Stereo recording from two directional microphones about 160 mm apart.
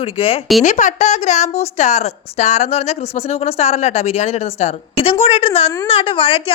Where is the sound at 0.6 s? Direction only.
50° left (ahead or behind).